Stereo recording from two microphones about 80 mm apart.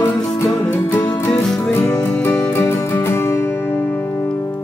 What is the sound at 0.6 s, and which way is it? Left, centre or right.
Music, left.